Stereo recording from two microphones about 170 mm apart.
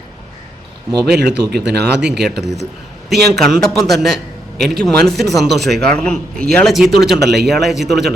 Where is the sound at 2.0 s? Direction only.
5° right (ahead or behind).